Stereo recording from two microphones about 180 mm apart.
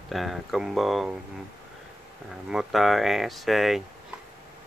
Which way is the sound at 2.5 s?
Centre (ahead or behind).